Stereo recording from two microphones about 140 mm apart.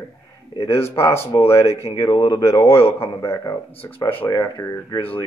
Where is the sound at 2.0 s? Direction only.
30° left (ahead or behind).